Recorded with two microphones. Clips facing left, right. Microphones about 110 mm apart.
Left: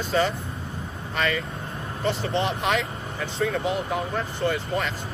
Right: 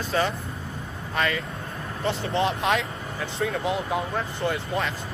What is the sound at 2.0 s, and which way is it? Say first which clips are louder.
Speech: even; 15° right (ahead or behind).